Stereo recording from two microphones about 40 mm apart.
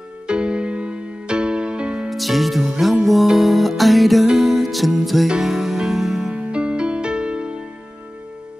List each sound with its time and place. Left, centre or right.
0.3 s music: right
2.0 s music: centre
6.3 s music: right